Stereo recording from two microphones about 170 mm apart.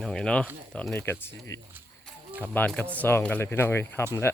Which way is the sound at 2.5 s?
5° left (ahead or behind).